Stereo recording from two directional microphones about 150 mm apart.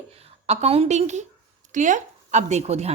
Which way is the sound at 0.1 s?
45° right (ahead or behind).